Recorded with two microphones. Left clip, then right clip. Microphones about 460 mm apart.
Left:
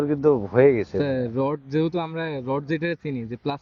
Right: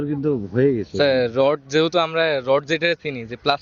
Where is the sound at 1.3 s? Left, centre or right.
Right.